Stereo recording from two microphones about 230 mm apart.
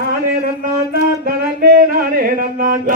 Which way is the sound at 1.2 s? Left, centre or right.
Right.